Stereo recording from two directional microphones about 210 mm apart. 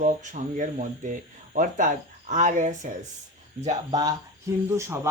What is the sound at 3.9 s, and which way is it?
Speech, 15° right (ahead or behind).